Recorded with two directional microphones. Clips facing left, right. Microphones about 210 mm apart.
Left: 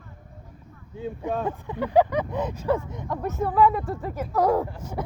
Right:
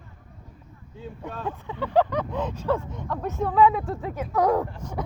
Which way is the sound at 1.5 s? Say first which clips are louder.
Left 2 dB; 10° left (ahead or behind).